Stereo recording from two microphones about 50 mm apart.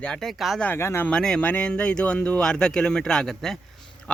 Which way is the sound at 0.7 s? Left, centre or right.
Left.